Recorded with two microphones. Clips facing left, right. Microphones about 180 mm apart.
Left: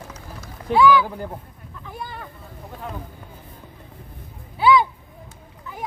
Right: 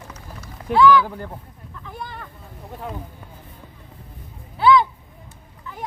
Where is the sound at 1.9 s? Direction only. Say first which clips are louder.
Left 1 dB; 5° left (ahead or behind).